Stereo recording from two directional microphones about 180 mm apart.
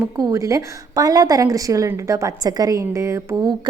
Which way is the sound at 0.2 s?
20° right (ahead or behind).